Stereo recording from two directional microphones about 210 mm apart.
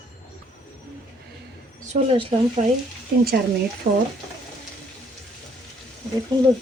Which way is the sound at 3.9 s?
40° right (ahead or behind).